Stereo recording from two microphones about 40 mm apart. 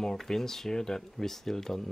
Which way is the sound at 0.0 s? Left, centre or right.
Centre.